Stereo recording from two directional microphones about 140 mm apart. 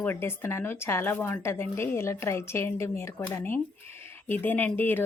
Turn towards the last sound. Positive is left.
turn(degrees=15)  # may be behind; listen again after turning